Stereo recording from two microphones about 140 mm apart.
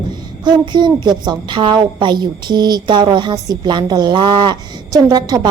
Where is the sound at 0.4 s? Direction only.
30° right (ahead or behind).